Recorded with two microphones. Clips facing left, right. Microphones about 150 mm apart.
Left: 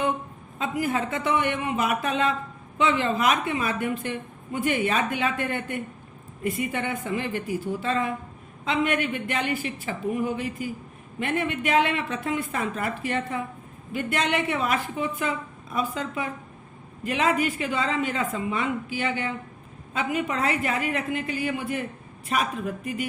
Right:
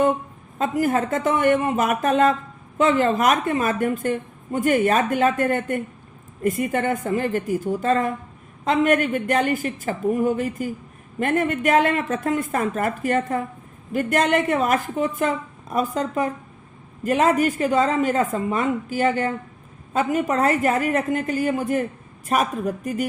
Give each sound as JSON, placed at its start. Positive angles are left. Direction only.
{"t": 0.6, "sound": "a woman's voice", "side_deg": -45}